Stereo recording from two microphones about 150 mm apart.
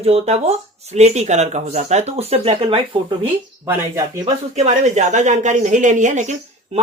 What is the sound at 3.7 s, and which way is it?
Speech, 20° right (ahead or behind).